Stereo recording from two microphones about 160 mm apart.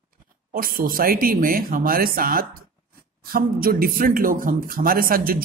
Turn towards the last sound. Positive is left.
turn(degrees=-65)  # may be behind; listen again after turning